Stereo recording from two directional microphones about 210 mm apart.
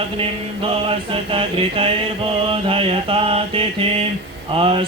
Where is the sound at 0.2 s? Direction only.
25° right (ahead or behind).